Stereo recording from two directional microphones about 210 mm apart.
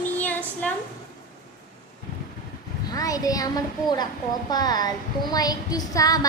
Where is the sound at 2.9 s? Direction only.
15° left (ahead or behind).